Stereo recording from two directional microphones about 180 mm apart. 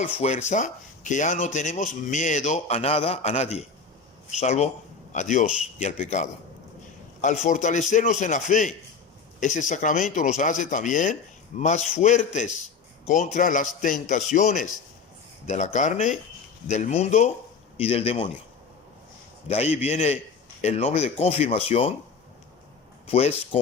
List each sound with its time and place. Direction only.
0.0 s speech: 40° left (ahead or behind)
19.5 s speech: 35° left (ahead or behind)
23.0 s speech: 35° left (ahead or behind)